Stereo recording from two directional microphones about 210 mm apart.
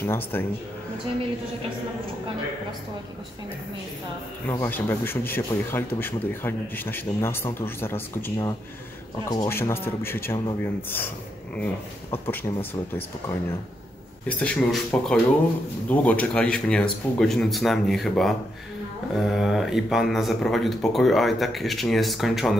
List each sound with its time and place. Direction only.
0.0 s speech: 10° left (ahead or behind)
4.5 s speech: 10° left (ahead or behind)